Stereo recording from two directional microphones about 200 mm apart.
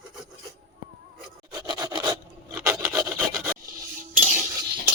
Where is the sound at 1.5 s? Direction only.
20° right (ahead or behind).